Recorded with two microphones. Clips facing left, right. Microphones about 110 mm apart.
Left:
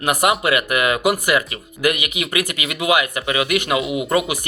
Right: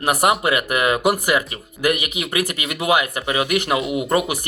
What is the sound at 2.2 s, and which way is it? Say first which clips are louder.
Speech: even; 35° right (ahead or behind).